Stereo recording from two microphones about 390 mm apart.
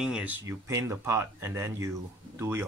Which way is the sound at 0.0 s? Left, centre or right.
Centre.